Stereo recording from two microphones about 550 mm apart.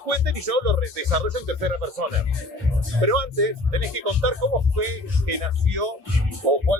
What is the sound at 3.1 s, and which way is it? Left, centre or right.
Speech, right.